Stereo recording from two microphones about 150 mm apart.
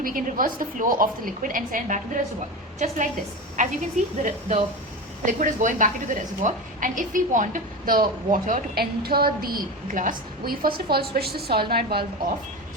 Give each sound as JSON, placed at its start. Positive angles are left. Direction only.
{"t": 0.0, "sound": "a woman's voice", "side_deg": -70}
{"t": 2.7, "sound": "a woman's voice", "side_deg": -50}
{"t": 10.9, "sound": "a woman's voice", "side_deg": -90}